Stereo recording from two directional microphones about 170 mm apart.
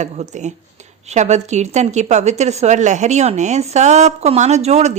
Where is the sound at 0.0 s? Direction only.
45° right (ahead or behind).